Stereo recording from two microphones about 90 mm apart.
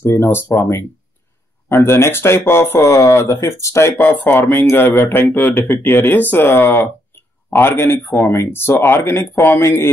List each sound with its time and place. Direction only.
0.0 s speech: 30° left (ahead or behind)
4.0 s speech: 20° left (ahead or behind)